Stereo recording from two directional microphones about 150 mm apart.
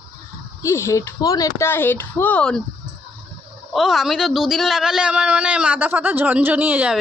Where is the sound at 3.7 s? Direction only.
Centre (ahead or behind).